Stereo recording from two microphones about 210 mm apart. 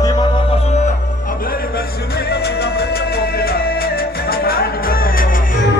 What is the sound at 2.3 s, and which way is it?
Music, 50° left (ahead or behind).